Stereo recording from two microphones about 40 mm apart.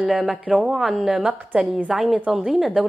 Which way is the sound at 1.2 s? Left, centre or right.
Centre.